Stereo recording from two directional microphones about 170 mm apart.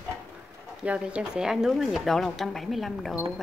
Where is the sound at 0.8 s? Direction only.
5° right (ahead or behind).